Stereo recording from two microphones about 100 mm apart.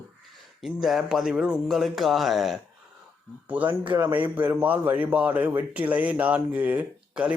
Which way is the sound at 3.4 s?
15° right (ahead or behind).